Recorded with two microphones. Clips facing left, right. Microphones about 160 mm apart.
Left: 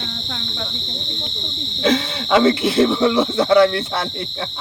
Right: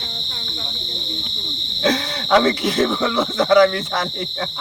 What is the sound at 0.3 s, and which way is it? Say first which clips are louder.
Cricket: left 4 dB; 90° left.